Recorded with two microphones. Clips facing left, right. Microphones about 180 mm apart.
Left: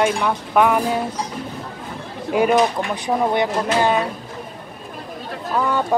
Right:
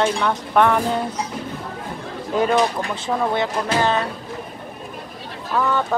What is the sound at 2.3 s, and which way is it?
Speech, 10° left (ahead or behind).